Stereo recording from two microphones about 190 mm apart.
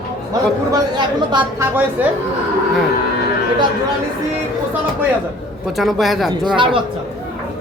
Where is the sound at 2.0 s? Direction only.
10° right (ahead or behind).